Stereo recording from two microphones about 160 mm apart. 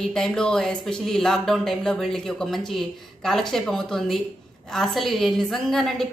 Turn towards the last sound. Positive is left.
turn(degrees=0)  # may be behind; listen again after turning